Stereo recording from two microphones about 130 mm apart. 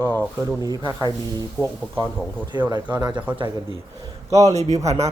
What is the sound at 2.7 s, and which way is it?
Speech, 35° right (ahead or behind).